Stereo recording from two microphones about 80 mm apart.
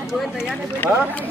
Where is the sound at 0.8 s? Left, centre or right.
Left.